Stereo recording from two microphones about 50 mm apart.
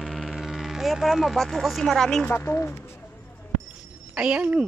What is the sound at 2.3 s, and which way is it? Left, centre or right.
Speech, left.